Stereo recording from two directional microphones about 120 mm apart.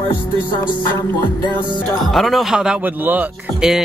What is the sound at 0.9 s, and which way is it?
Music, 40° left (ahead or behind).